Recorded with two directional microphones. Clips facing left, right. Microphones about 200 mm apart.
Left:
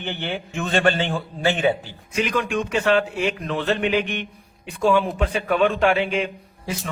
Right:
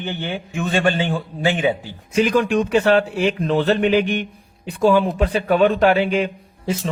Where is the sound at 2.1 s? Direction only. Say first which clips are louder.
Right 6 dB; 35° right (ahead or behind).